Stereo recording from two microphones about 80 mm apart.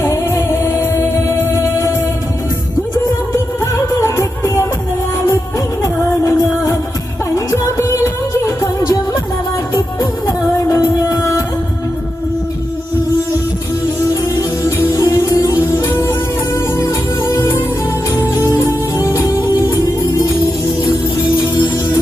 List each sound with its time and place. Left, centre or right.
0.0 s music: left
3.3 s music: left
6.0 s music: left
10.0 s music: left
14.8 s music: left
17.2 s music: left
18.5 s music: left